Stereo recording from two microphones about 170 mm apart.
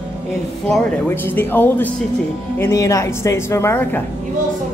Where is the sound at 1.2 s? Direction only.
10° left (ahead or behind).